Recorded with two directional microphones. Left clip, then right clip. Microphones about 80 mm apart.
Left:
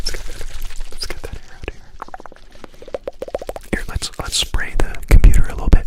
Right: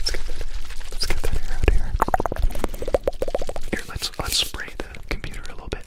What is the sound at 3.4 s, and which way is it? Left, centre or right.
Whispering, left.